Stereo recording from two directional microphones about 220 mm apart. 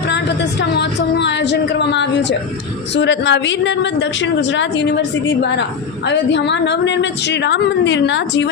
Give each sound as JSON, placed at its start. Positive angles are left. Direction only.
{"t": 0.7, "sound": "a woman's voice", "side_deg": 50}